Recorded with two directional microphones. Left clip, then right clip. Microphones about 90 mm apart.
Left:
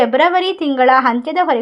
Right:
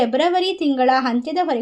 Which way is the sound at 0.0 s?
5° right (ahead or behind).